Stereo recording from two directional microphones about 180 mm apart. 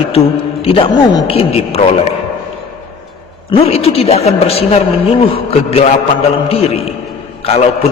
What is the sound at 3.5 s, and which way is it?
A man's voice, 35° left (ahead or behind).